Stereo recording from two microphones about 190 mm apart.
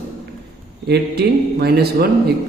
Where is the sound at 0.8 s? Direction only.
60° right (ahead or behind).